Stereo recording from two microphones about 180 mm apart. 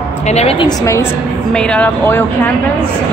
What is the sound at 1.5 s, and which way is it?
Speech, 5° left (ahead or behind).